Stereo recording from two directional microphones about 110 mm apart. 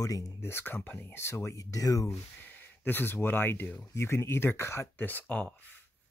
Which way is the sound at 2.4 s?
15° left (ahead or behind).